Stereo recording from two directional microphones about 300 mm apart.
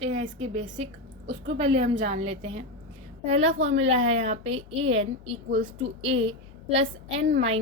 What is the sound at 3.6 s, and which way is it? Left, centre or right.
A woman's voice, right.